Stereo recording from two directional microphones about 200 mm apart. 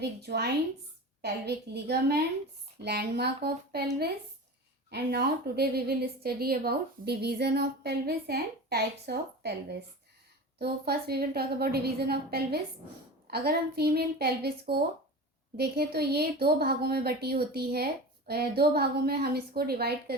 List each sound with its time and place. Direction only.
0.2 s a woman's voice: 55° right (ahead or behind)
4.9 s a woman's voice: 50° right (ahead or behind)